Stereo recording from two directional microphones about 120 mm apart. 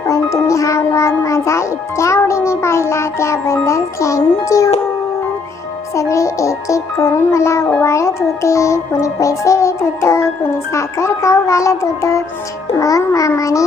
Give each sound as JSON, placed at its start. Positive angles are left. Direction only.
{"t": 0.1, "sound": "a child's voice", "side_deg": 25}
{"t": 5.9, "sound": "music", "side_deg": 25}